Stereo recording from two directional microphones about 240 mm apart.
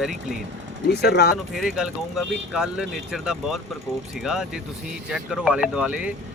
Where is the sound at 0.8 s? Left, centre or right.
Left.